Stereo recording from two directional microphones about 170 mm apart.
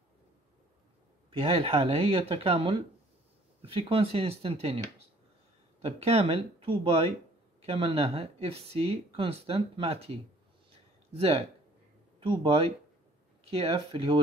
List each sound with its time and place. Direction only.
1.4 s speech: 35° right (ahead or behind)
5.8 s speech: 35° right (ahead or behind)
11.1 s speech: 35° right (ahead or behind)